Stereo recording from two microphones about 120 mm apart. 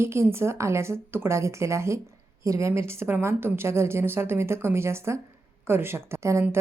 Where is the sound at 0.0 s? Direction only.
20° right (ahead or behind).